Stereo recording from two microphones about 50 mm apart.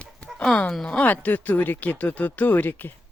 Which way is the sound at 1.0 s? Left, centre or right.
Left.